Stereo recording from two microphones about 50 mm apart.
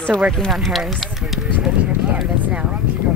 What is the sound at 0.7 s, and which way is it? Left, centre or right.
Speech, centre.